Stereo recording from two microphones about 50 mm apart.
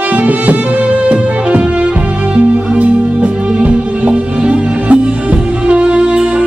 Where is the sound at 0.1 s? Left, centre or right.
Right.